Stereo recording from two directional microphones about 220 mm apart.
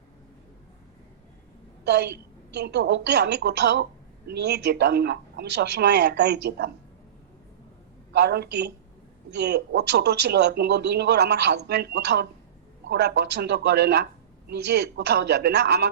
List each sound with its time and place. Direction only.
1.8 s a woman's voice: 50° right (ahead or behind)
8.1 s a man's voice: 50° right (ahead or behind)